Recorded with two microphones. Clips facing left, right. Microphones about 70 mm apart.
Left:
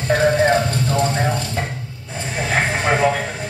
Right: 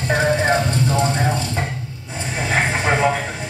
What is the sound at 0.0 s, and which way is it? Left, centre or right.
Music, centre.